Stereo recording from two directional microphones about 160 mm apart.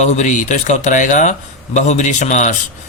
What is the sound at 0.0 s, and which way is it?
Speech, 50° left (ahead or behind).